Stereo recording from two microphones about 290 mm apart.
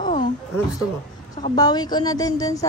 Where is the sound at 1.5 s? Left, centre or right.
Centre.